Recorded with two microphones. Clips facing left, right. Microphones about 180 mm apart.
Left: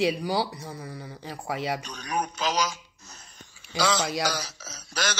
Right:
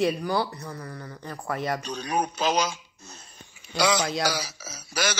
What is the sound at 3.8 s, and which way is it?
A man's voice, 15° right (ahead or behind).